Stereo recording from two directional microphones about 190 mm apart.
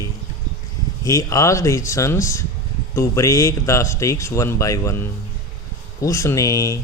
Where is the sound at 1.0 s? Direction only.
15° left (ahead or behind).